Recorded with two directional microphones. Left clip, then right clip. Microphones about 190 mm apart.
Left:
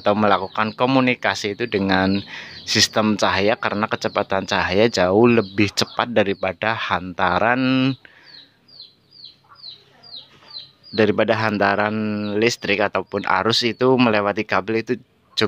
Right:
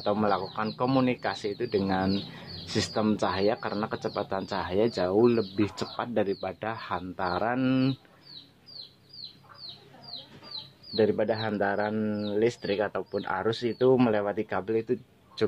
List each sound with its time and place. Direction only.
0.0 s speech: 25° left (ahead or behind)
11.0 s speech: 25° left (ahead or behind)